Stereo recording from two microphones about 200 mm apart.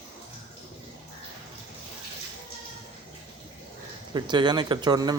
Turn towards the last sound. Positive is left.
turn(degrees=-20)  # may be behind; listen again after turning